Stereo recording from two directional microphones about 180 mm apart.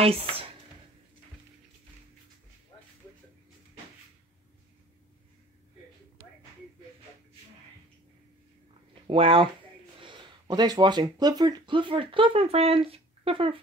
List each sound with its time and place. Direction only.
0.0 s speech: 30° right (ahead or behind)
9.0 s speech: 30° right (ahead or behind)